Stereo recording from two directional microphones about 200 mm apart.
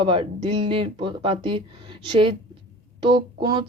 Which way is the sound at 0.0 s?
25° right (ahead or behind).